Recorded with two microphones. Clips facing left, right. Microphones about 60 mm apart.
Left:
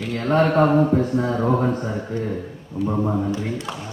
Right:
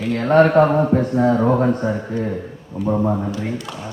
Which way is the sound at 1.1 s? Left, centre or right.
Right.